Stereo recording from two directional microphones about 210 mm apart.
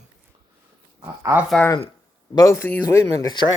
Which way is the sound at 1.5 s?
5° left (ahead or behind).